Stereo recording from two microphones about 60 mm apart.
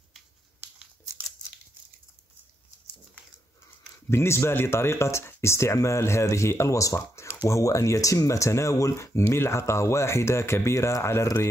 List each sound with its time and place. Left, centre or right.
4.1 s speech: left
7.0 s speech: left
7.4 s speech: left